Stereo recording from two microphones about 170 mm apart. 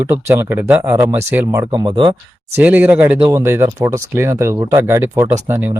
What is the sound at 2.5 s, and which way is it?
Speech, 10° right (ahead or behind).